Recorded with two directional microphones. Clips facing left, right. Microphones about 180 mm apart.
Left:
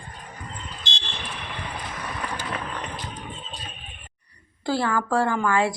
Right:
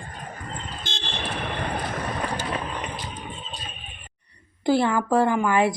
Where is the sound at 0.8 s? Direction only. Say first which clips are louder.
Right 4 dB; 50° right (ahead or behind).